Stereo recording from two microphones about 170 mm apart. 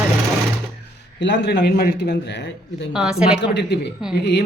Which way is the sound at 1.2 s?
90° left.